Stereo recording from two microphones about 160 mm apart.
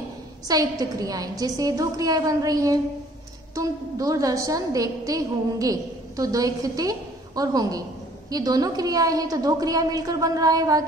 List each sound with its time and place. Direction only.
0.5 s a woman's voice: 25° right (ahead or behind)